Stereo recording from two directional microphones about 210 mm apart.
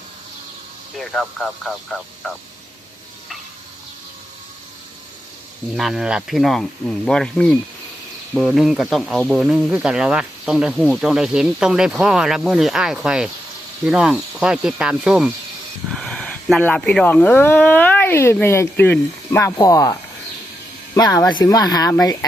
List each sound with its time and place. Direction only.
0.9 s speech: centre (ahead or behind)
5.7 s speech: centre (ahead or behind); by 22.3 s 15° left (ahead or behind)